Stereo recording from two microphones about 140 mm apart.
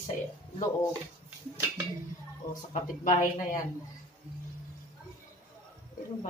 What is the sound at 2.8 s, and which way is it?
Speech, 70° left (ahead or behind).